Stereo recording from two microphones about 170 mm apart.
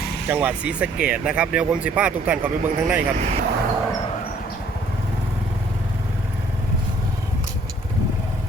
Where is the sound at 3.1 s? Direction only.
45° right (ahead or behind).